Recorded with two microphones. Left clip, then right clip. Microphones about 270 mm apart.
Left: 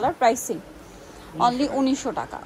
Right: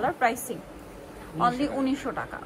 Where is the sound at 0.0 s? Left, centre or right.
Centre.